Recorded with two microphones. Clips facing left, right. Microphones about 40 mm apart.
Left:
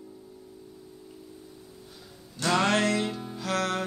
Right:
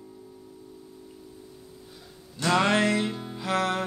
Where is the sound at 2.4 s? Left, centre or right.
Centre.